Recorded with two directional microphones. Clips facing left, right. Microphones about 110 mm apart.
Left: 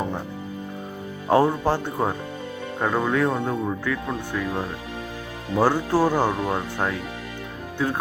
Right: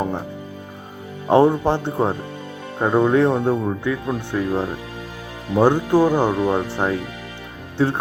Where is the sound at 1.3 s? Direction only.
25° right (ahead or behind).